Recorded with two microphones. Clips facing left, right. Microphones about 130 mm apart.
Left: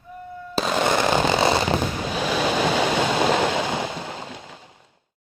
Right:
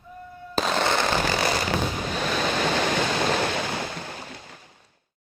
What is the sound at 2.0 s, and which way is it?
Waves, 10° left (ahead or behind).